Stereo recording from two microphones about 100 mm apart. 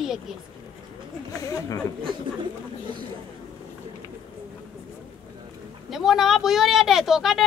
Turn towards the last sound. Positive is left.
turn(degrees=-5)  # may be behind; listen again after turning